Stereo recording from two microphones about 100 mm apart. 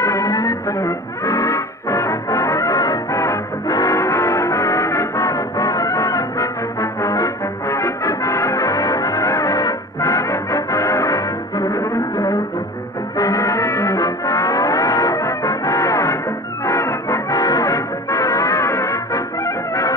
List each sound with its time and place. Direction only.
0.0 s music: 35° left (ahead or behind)
16.6 s brass instrument: 30° left (ahead or behind)